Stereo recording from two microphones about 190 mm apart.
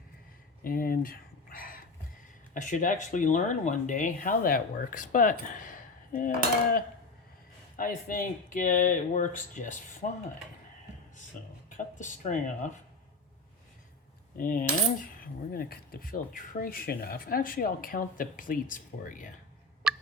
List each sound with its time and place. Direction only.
0.6 s a sound: 50° left (ahead or behind)
2.6 s speech: 40° left (ahead or behind)
7.8 s speech: 45° left (ahead or behind)
11.8 s speech: 40° left (ahead or behind)
14.3 s speech: 45° left (ahead or behind)
19.8 s fowl: 5° right (ahead or behind)